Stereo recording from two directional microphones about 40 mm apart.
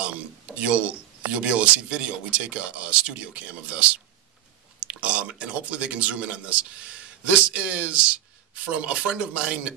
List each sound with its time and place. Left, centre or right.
0.0 s speech: right